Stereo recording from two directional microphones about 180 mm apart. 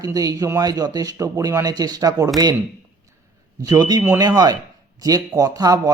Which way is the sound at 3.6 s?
20° right (ahead or behind).